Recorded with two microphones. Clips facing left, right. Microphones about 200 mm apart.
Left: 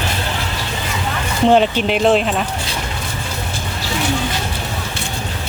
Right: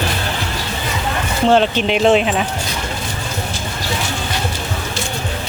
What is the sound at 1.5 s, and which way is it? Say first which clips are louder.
Speech: even; 10° left (ahead or behind).